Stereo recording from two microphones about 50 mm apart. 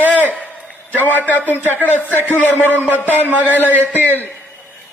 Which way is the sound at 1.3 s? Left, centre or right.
Left.